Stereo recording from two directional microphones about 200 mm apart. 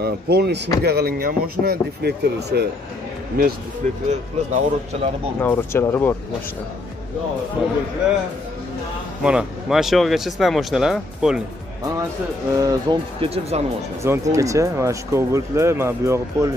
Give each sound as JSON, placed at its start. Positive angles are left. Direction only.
{"t": 0.0, "sound": "a man's voice", "side_deg": -55}
{"t": 4.1, "sound": "speech", "side_deg": -35}
{"t": 5.4, "sound": "speech", "side_deg": 10}
{"t": 7.6, "sound": "speech", "side_deg": 0}
{"t": 9.2, "sound": "speech", "side_deg": -5}
{"t": 12.5, "sound": "speech", "side_deg": -20}
{"t": 14.0, "sound": "speech", "side_deg": -15}